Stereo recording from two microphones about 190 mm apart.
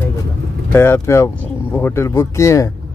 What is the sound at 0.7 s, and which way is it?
Speech, 10° left (ahead or behind).